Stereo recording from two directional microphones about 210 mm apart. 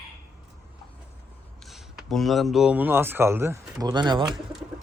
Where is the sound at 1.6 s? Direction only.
Centre (ahead or behind); by 4.2 s 20° right (ahead or behind).